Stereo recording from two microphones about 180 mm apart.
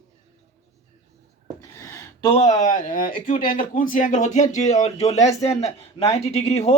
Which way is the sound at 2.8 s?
50° left (ahead or behind).